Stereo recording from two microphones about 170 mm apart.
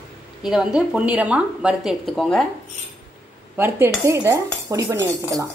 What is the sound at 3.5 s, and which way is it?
Speech, 15° right (ahead or behind).